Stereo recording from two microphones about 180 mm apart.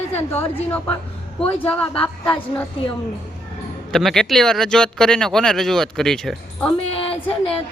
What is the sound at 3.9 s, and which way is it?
Speech, centre (ahead or behind).